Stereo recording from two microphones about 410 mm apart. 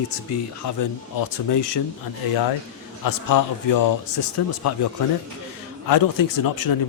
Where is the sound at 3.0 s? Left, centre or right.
Left.